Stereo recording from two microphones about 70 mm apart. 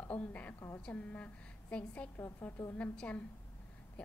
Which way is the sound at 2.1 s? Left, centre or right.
Left.